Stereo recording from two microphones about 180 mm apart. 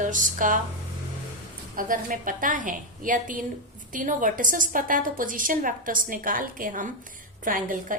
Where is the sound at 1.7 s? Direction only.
50° right (ahead or behind).